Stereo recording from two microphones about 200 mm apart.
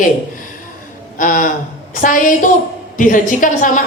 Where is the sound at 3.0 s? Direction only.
40° left (ahead or behind).